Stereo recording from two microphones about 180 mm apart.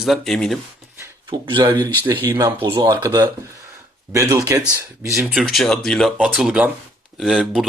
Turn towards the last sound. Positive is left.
turn(degrees=0)  # may be behind; listen again after turning